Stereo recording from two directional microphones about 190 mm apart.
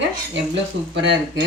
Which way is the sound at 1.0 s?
70° right (ahead or behind).